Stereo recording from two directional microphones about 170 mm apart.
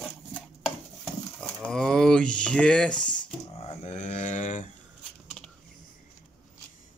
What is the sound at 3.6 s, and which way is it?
Mantra, 40° left (ahead or behind).